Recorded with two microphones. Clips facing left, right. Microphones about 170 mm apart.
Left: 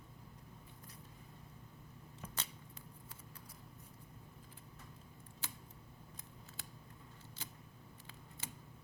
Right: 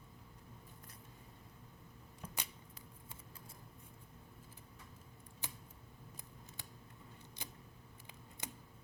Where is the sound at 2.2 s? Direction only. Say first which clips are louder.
Even; 15° right (ahead or behind).